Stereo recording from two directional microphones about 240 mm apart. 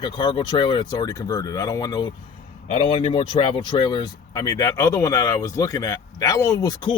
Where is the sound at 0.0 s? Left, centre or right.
Centre.